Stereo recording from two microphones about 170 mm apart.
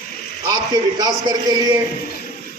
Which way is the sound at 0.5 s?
20° right (ahead or behind).